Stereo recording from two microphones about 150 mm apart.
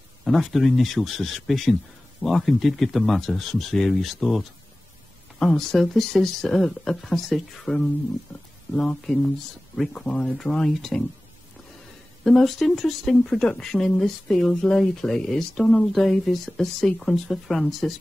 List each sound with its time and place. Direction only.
0.2 s speech: centre (ahead or behind)
12.3 s speech: centre (ahead or behind)